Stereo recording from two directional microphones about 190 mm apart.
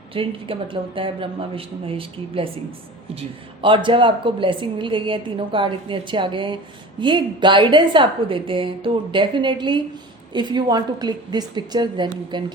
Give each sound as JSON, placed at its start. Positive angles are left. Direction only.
{"t": 0.1, "sound": "a woman's voice", "side_deg": -30}